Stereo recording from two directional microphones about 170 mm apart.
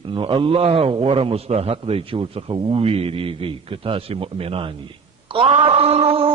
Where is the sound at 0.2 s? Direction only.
30° right (ahead or behind).